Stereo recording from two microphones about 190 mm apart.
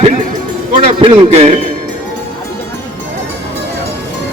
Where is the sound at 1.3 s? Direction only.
30° right (ahead or behind).